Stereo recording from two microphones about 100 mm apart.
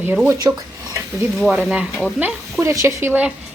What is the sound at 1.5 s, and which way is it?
Speech, 15° right (ahead or behind).